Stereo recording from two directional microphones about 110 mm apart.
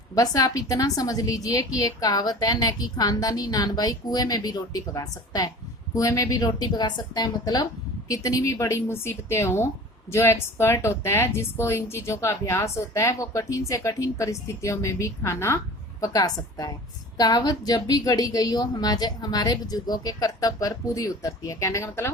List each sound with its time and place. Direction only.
0.1 s a woman's voice: 35° left (ahead or behind)